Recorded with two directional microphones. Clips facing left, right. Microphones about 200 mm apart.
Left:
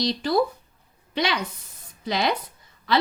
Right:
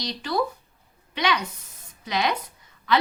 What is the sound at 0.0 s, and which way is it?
A woman's voice, 35° left (ahead or behind).